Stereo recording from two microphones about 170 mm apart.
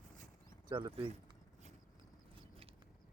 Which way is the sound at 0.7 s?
30° right (ahead or behind).